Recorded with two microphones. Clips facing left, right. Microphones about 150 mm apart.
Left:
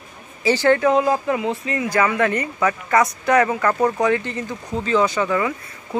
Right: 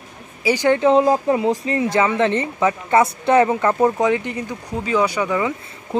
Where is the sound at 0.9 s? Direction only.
30° right (ahead or behind).